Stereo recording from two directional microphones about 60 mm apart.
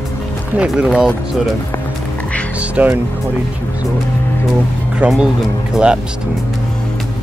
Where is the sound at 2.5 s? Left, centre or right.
Right.